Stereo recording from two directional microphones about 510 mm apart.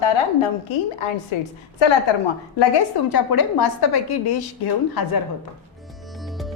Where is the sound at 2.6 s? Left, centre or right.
Left.